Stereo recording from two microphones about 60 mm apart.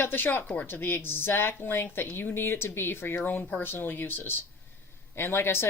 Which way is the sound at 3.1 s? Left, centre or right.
Left.